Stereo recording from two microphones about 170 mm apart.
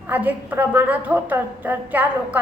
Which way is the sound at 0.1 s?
10° right (ahead or behind).